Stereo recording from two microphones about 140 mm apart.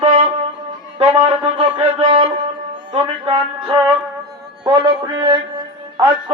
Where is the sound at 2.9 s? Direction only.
35° right (ahead or behind).